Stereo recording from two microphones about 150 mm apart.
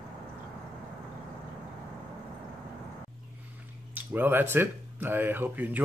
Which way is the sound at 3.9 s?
15° right (ahead or behind).